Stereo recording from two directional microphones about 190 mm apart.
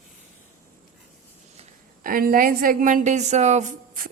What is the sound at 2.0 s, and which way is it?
A woman's voice, 45° right (ahead or behind).